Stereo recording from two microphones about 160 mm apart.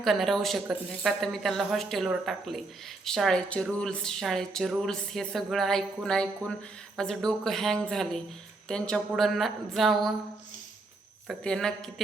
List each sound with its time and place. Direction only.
0.0 s speech: centre (ahead or behind)
11.3 s speech: 5° left (ahead or behind)